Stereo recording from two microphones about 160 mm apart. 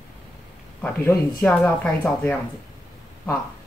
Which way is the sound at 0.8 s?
10° left (ahead or behind).